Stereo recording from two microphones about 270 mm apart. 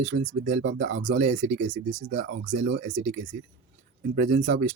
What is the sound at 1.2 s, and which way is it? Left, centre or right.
Speech, right.